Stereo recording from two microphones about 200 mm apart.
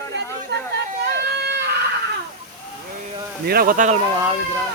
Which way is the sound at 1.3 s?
55° right (ahead or behind).